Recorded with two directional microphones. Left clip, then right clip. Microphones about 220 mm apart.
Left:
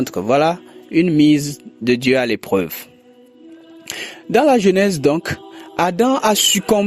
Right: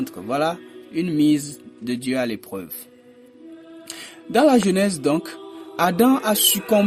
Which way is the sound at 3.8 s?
35° left (ahead or behind).